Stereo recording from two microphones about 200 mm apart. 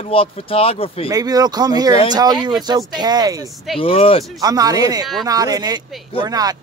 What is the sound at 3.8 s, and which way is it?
Speech, 30° left (ahead or behind).